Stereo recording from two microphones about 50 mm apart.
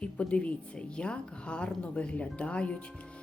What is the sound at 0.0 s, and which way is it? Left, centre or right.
A woman's voice, left.